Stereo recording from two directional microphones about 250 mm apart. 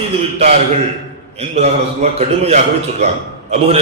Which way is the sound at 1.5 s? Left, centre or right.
Right.